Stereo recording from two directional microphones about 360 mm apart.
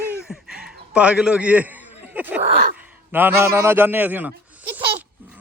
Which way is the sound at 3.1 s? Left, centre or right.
Centre.